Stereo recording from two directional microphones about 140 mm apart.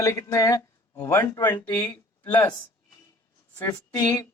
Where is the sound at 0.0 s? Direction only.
20° left (ahead or behind).